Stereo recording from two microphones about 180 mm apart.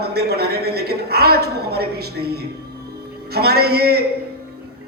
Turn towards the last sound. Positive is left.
turn(degrees=-60)  # may be behind; listen again after turning